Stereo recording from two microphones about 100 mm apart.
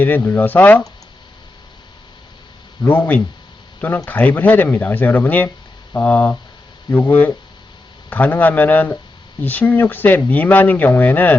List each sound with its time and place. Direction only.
0.0 s speech: 20° left (ahead or behind)
2.9 s speech: 20° left (ahead or behind)